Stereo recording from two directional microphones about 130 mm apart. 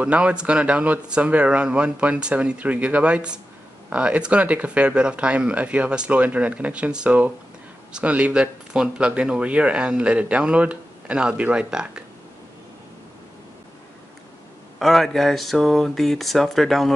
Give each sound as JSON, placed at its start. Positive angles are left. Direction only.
{"t": 0.0, "sound": "speech", "side_deg": -10}
{"t": 14.8, "sound": "speech", "side_deg": 0}